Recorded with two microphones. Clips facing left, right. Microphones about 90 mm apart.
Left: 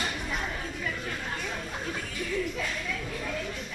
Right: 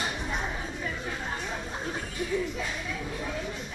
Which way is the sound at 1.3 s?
20° right (ahead or behind).